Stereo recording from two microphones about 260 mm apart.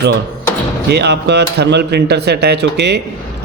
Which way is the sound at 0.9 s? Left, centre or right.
Right.